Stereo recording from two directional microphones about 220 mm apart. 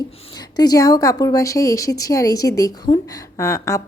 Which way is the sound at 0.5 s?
15° left (ahead or behind).